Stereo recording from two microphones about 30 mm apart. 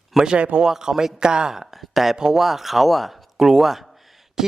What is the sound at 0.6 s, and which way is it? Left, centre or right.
Speech, centre.